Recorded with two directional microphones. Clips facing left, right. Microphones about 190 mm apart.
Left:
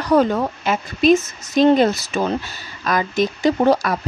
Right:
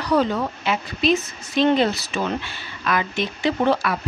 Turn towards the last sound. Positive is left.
turn(degrees=40)  # may be behind; listen again after turning